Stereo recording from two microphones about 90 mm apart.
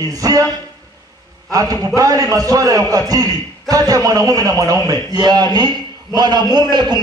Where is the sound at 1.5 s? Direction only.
40° right (ahead or behind).